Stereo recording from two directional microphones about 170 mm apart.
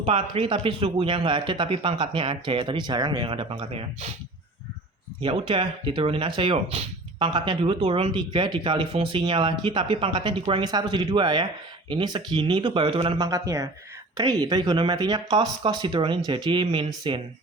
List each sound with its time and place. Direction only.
0.0 s speech: 30° right (ahead or behind)
5.2 s speech: 30° right (ahead or behind)